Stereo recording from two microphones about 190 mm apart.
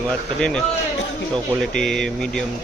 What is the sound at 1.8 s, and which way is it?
Speech, 5° left (ahead or behind).